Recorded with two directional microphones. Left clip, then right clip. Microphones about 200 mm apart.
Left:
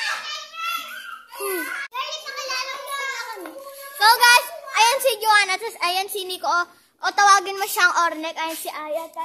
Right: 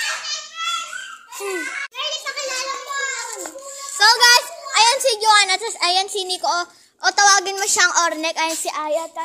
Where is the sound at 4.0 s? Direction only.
10° right (ahead or behind).